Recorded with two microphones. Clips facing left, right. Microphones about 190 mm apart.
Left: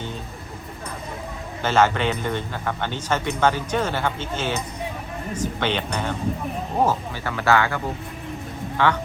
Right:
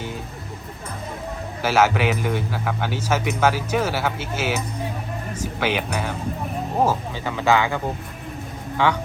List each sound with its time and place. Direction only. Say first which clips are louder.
1.6 s speech: right 1 dB; 10° right (ahead or behind)
8.8 s speech: even; 15° right (ahead or behind)